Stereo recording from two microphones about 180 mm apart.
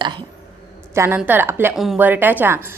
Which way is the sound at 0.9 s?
15° right (ahead or behind).